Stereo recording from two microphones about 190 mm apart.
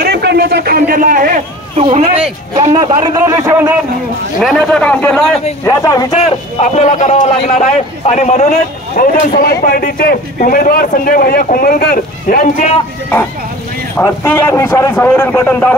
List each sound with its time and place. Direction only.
0.0 s a man's voice: 60° right (ahead or behind)
1.8 s speech: 35° right (ahead or behind)
2.7 s a man's voice: 25° right (ahead or behind)
4.4 s a man's voice: centre (ahead or behind)
5.7 s a man's voice: 15° left (ahead or behind)
6.2 s a man's voice: 35° left (ahead or behind)
13.9 s a man's voice: 10° left (ahead or behind)